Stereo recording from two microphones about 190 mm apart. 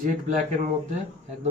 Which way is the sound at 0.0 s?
45° right (ahead or behind).